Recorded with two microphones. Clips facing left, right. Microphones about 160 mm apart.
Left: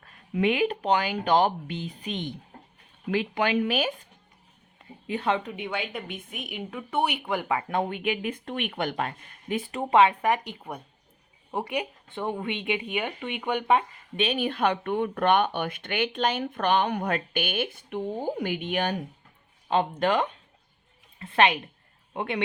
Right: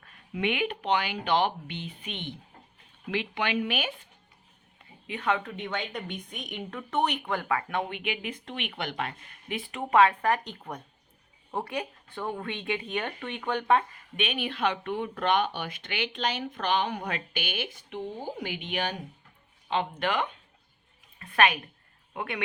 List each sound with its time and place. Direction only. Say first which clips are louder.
0.0 s speech: left 5 dB; 35° left (ahead or behind)
5.0 s speech: left 2 dB; 30° left (ahead or behind)
5.4 s speech: left 2 dB; 15° left (ahead or behind)
7.7 s speech: left 4 dB; 40° left (ahead or behind)
9.9 s speech: left 1 dB; 20° left (ahead or behind)
14.2 s speech: left 4 dB; 40° left (ahead or behind)
21.2 s a woman's voice: left 2 dB; 25° left (ahead or behind)